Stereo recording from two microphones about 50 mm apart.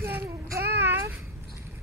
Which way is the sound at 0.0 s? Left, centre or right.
Right.